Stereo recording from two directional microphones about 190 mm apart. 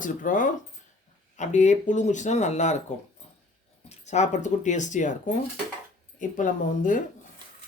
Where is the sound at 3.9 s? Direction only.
35° left (ahead or behind).